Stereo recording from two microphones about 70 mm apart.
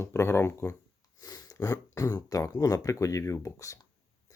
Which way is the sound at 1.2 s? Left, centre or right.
Left.